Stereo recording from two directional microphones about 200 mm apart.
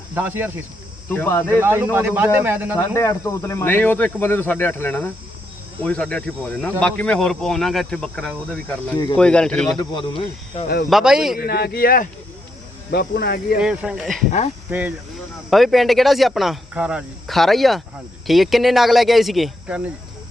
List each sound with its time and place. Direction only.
0.1 s speech: 10° right (ahead or behind)
1.1 s speech: 10° left (ahead or behind)
1.6 s speech: 10° right (ahead or behind)
2.7 s speech: 15° left (ahead or behind)
9.7 s speech: 25° left (ahead or behind)
10.8 s speech: centre (ahead or behind)
11.3 s speech: 50° left (ahead or behind)
13.6 s speech: 5° right (ahead or behind)